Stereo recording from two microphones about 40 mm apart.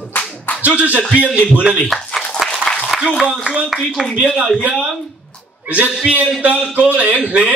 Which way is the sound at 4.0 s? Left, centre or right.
Centre.